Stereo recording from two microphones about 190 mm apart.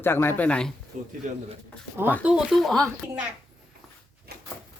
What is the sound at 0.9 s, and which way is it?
Speech, 40° right (ahead or behind).